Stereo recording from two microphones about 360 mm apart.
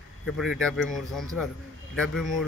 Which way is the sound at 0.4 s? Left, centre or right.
Centre.